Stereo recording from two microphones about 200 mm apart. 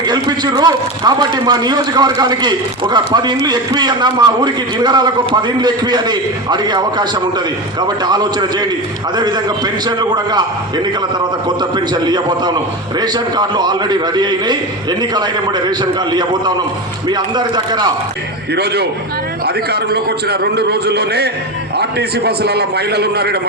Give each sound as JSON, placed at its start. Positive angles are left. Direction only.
{"t": 0.0, "sound": "a man's voice", "side_deg": -20}
{"t": 11.4, "sound": "a man's voice", "side_deg": -20}
{"t": 18.5, "sound": "a man's voice", "side_deg": -55}